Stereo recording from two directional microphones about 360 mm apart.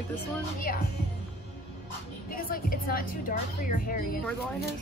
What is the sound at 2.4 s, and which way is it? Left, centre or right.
A woman's voice, left.